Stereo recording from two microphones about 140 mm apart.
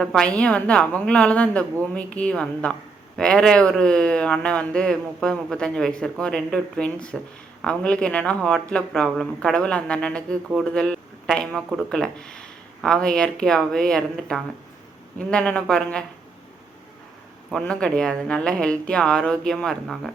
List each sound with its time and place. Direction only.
0.0 s speech: 5° left (ahead or behind)
17.5 s speech: 5° left (ahead or behind)